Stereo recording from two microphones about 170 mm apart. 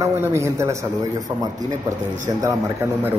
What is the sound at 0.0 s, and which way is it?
Speech, 15° right (ahead or behind).